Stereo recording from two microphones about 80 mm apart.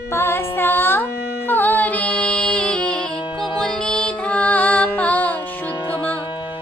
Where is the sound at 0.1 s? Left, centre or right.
Left.